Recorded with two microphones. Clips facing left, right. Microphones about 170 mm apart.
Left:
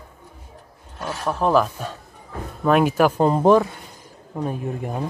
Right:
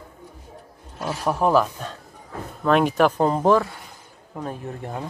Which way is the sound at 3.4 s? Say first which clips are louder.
Left 4 dB; 20° left (ahead or behind).